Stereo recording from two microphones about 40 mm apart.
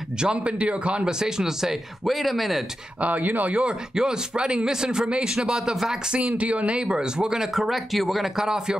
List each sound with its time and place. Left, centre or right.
0.4 s speech: right
1.0 s speech: centre
2.0 s speech: centre
3.0 s speech: right
3.5 s speech: right
6.1 s speech: right; by 8.3 s centre
8.4 s speech: centre